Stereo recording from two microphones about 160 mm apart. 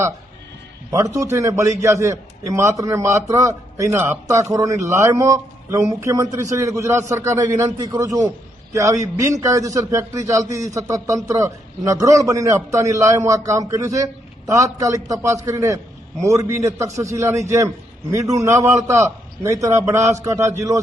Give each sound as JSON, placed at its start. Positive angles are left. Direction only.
{"t": 1.1, "sound": "a man's voice", "side_deg": -20}